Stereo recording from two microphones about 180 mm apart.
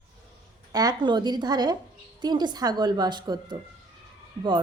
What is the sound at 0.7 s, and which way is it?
A woman's voice, 20° right (ahead or behind).